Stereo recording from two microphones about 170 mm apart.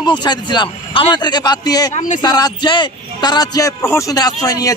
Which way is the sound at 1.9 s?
45° left (ahead or behind).